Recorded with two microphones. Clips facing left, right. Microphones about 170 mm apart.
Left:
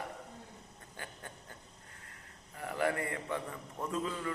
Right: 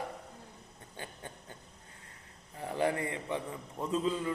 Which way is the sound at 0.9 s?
20° right (ahead or behind).